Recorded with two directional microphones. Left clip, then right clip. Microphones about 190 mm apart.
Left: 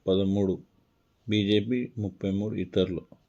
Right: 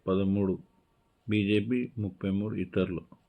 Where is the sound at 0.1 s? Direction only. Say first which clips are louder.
Left 3 dB; 20° left (ahead or behind).